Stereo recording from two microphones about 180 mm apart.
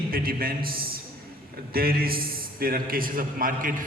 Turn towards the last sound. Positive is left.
turn(degrees=-50)  # may be behind; listen again after turning